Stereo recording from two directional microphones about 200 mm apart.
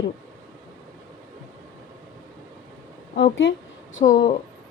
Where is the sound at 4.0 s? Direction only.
40° left (ahead or behind).